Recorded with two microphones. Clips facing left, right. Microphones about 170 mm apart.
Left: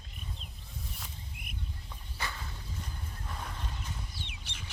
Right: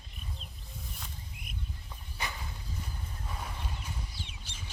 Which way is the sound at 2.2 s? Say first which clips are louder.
Right 1 dB; 15° right (ahead or behind).